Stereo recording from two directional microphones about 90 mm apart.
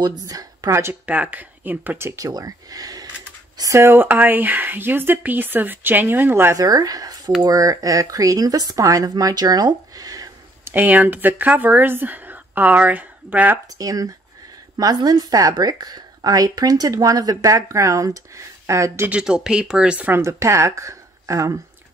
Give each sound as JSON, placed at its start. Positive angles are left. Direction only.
{"t": 0.0, "sound": "speech", "side_deg": -45}
{"t": 1.0, "sound": "speech", "side_deg": -15}
{"t": 3.7, "sound": "speech", "side_deg": -25}
{"t": 6.5, "sound": "speech", "side_deg": -45}
{"t": 10.6, "sound": "speech", "side_deg": -20}
{"t": 13.7, "sound": "a woman's voice", "side_deg": -40}
{"t": 19.0, "sound": "speech", "side_deg": -10}
{"t": 20.1, "sound": "speech", "side_deg": -30}